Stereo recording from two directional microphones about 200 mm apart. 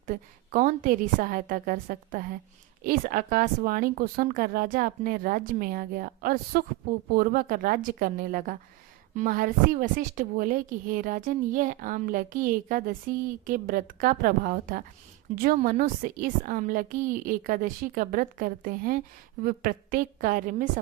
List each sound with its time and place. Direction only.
0.0 s a woman's voice: 40° right (ahead or behind)